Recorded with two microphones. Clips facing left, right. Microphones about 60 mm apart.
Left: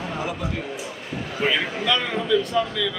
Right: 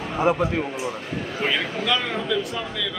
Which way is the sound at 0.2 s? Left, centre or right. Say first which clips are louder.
Right 13 dB; right.